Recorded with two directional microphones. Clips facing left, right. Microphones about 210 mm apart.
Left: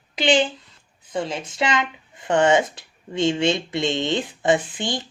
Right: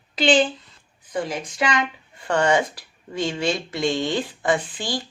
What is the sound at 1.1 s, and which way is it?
Speech, 25° left (ahead or behind).